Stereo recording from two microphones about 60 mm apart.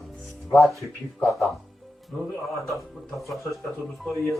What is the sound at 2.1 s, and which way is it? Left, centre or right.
Speech, centre.